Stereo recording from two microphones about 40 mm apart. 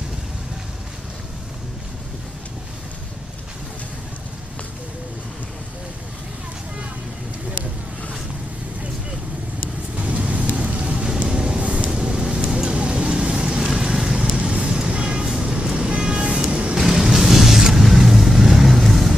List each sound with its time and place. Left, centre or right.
9.9 s vehicle: right
11.1 s music: right
11.9 s vehicle: right
16.0 s music: right
16.7 s vehicle: centre